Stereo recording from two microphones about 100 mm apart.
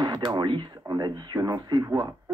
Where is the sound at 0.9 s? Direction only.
35° right (ahead or behind).